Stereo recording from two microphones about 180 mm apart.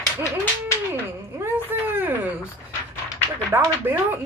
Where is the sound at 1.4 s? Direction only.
10° right (ahead or behind).